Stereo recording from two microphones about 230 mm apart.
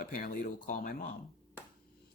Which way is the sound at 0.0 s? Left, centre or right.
Left.